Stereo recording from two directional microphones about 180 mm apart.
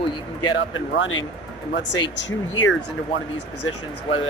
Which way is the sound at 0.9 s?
90° left.